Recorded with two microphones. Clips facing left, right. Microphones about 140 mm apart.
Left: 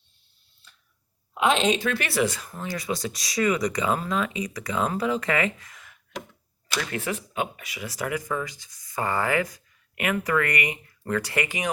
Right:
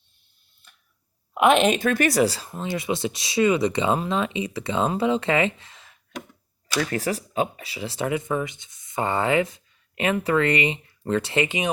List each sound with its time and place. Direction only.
0.6 s a sound: 55° right (ahead or behind)
1.3 s a woman's voice: 55° right (ahead or behind); by 2.5 s 35° right (ahead or behind)
2.5 s speech: 25° right (ahead or behind)